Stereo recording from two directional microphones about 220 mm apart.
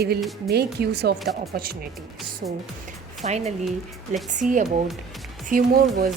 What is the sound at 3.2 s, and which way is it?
Speech, 30° right (ahead or behind).